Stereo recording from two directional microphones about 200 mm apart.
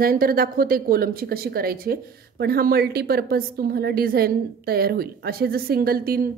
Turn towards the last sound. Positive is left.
turn(degrees=-50)  # may be behind; listen again after turning